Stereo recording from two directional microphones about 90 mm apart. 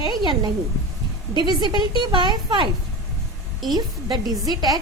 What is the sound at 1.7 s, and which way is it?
Speech, 55° right (ahead or behind).